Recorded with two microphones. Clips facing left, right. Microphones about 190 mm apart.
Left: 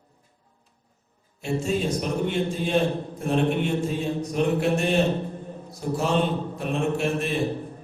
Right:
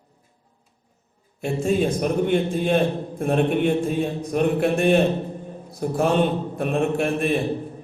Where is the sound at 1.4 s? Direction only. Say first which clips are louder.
Right 4 dB; 55° right (ahead or behind).